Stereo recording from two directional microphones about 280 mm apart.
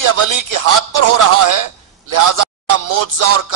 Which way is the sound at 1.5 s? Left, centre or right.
Right.